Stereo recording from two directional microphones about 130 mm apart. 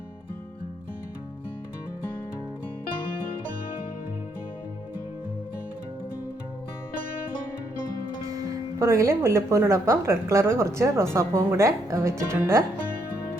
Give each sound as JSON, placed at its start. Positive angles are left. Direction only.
{"t": 8.3, "sound": "a woman's voice", "side_deg": -25}